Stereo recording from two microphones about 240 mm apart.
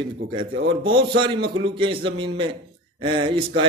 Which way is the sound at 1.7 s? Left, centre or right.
Right.